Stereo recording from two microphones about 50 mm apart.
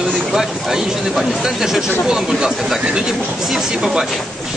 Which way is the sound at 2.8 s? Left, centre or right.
Centre.